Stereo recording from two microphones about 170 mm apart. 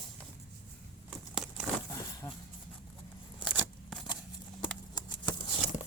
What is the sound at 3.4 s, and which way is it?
Scissors, centre (ahead or behind).